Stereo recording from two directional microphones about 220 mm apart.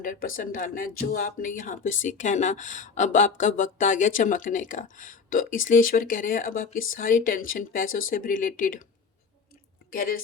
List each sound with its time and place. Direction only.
0.0 s speech: 40° left (ahead or behind)
9.9 s speech: 40° left (ahead or behind)